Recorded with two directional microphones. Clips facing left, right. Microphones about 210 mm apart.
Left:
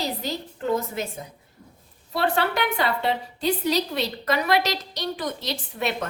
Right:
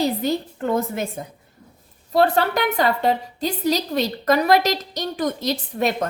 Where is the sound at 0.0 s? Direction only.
55° right (ahead or behind).